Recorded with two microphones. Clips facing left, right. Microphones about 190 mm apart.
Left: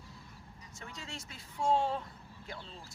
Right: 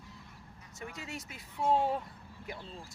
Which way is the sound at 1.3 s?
5° right (ahead or behind).